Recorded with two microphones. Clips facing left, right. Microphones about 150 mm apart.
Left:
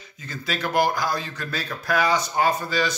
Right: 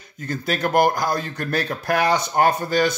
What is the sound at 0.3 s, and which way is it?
Speech, 50° right (ahead or behind).